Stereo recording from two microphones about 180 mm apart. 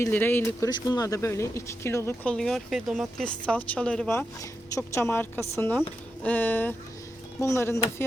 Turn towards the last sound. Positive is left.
turn(degrees=15)  # may be behind; listen again after turning